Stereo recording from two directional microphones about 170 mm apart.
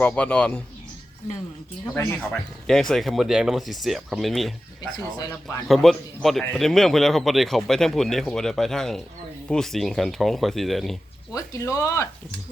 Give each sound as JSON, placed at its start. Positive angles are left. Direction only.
{"t": 0.0, "sound": "speech", "side_deg": 5}
{"t": 2.0, "sound": "speech", "side_deg": 20}
{"t": 2.3, "sound": "speech", "side_deg": 0}
{"t": 4.9, "sound": "speech", "side_deg": 20}
{"t": 5.6, "sound": "speech", "side_deg": 0}
{"t": 11.3, "sound": "speech", "side_deg": 20}